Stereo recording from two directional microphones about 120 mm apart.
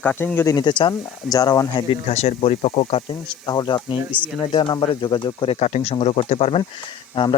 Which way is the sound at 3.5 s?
35° left (ahead or behind).